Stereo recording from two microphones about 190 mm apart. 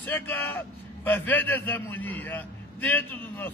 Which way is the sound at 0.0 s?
10° left (ahead or behind).